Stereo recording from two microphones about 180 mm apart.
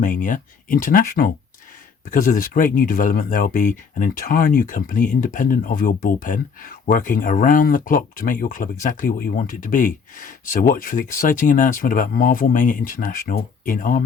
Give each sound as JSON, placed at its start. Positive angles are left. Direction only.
{"t": 0.0, "sound": "speech", "side_deg": 50}